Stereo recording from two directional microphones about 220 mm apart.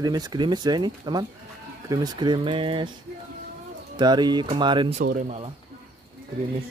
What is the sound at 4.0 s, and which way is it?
Speech, 20° right (ahead or behind).